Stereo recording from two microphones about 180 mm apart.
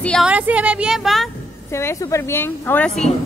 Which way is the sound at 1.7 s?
15° left (ahead or behind).